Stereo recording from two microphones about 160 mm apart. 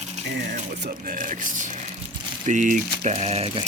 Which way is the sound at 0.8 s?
65° right (ahead or behind).